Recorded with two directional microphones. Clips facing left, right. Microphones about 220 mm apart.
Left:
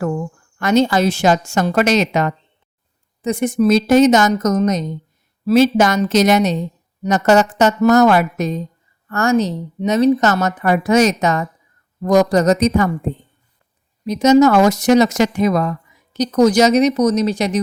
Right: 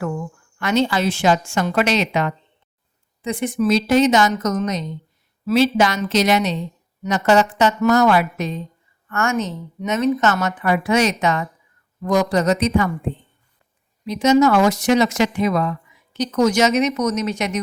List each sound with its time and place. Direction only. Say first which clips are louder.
0.0 s speech: left 4 dB; 40° left (ahead or behind)